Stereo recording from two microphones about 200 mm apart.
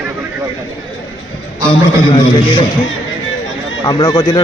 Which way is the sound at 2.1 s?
25° left (ahead or behind).